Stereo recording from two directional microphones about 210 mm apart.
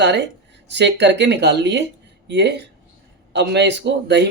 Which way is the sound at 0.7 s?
55° right (ahead or behind).